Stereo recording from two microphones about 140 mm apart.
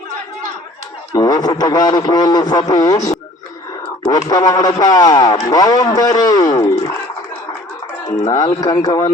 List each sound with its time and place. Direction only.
1.1 s speech: 30° left (ahead or behind)
4.1 s speech: 30° left (ahead or behind)
8.3 s speech: 25° left (ahead or behind)